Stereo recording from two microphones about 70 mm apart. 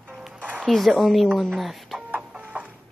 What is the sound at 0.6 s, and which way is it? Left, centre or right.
Speech, centre.